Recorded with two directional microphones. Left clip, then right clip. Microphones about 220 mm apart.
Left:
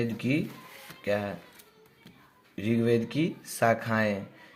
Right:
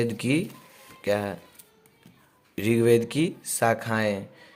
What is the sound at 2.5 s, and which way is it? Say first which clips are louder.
Speech: right 6 dB; 30° right (ahead or behind).